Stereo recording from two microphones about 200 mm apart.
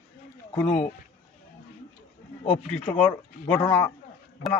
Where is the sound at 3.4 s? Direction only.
25° left (ahead or behind).